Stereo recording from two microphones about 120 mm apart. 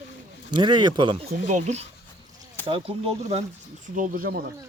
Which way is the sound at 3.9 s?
90° right.